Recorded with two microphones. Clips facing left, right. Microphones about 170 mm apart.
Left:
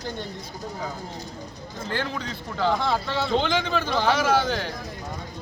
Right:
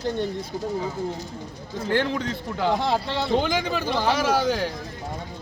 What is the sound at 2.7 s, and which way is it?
Speech, 30° right (ahead or behind).